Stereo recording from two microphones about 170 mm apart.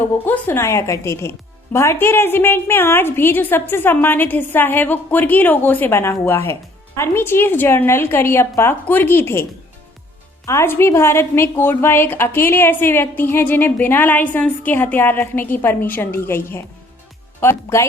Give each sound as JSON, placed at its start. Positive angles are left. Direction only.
{"t": 0.0, "sound": "speech", "side_deg": 10}